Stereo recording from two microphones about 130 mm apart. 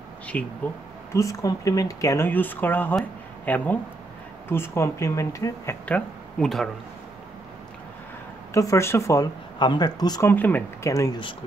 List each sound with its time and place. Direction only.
0.3 s speech: 10° left (ahead or behind)
1.1 s speech: 25° left (ahead or behind)
5.9 s speech: 10° left (ahead or behind)
8.5 s speech: 25° left (ahead or behind)
10.2 s speech: 15° left (ahead or behind)